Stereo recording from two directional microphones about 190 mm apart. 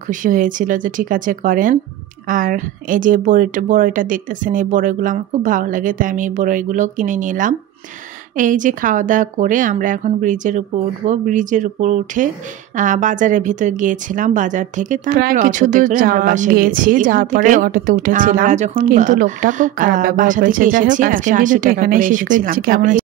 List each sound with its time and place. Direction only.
0.1 s a woman's voice: 45° right (ahead or behind)